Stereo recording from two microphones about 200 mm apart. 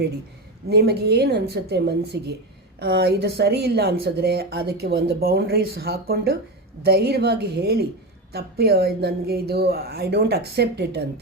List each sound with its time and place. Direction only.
0.7 s a woman's voice: 55° right (ahead or behind)